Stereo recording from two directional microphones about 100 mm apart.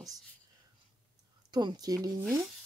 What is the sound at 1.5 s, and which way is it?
Speech, 45° right (ahead or behind).